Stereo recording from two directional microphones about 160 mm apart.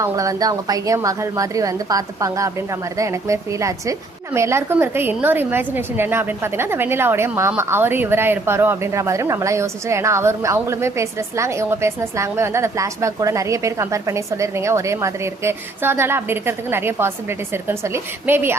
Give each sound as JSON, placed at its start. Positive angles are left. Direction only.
{"t": 0.0, "sound": "a woman's voice", "side_deg": -20}